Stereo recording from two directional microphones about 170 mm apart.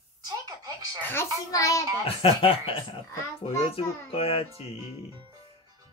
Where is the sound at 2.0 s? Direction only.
35° left (ahead or behind).